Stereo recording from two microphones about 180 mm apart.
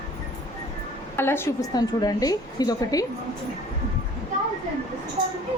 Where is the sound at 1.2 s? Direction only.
15° left (ahead or behind).